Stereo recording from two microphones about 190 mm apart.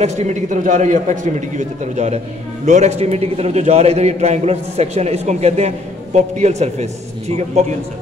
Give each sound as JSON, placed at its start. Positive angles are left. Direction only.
{"t": 0.0, "sound": "a man's voice", "side_deg": -35}